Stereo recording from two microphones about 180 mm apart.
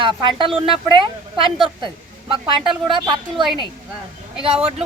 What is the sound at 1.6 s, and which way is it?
Speech, 25° right (ahead or behind).